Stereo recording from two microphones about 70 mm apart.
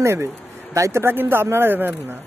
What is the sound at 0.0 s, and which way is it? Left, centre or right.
Speech, right.